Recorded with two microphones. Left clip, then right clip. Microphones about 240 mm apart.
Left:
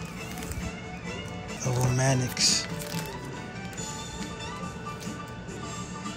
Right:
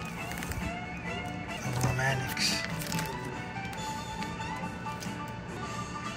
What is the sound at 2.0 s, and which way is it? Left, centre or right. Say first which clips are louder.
Music: left 4 dB; centre.